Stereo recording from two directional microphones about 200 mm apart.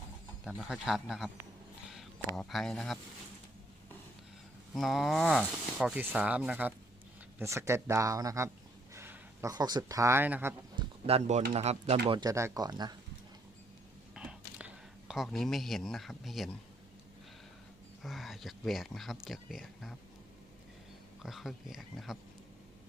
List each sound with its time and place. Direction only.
0.4 s speech: 5° right (ahead or behind)
4.7 s speech: centre (ahead or behind)
10.8 s a sound: 30° right (ahead or behind)
11.5 s speech: 30° right (ahead or behind)
14.2 s a sound: 5° right (ahead or behind)
18.0 s speech: centre (ahead or behind)
21.2 s speech: centre (ahead or behind)